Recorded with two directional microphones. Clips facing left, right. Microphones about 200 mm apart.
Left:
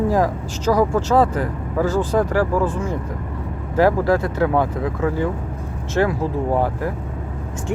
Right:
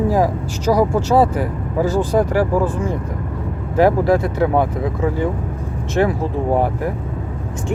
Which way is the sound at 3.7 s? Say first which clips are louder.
Right 2 dB; 15° right (ahead or behind).